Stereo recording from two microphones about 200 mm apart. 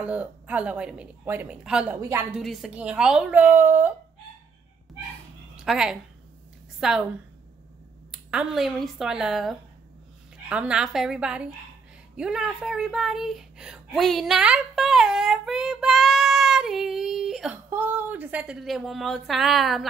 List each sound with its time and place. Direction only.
0.0 s a woman's voice: 5° right (ahead or behind)
2.0 s a woman's voice: 15° right (ahead or behind)
2.3 s a woman's voice: centre (ahead or behind)
5.6 s speech: 5° right (ahead or behind)
8.1 s speech: 5° right (ahead or behind)